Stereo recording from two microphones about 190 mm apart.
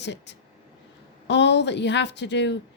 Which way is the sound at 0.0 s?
65° left (ahead or behind).